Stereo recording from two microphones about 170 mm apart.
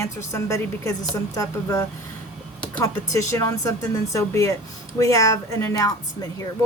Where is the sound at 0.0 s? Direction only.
15° left (ahead or behind).